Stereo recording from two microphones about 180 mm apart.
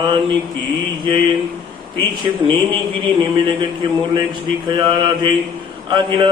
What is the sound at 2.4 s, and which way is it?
A man's voice, 30° right (ahead or behind).